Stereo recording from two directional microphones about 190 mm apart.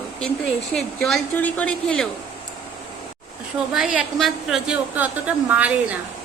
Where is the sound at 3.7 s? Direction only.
5° right (ahead or behind).